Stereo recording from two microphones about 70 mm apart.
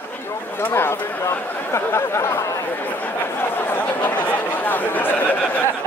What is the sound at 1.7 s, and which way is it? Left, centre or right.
Speech, left.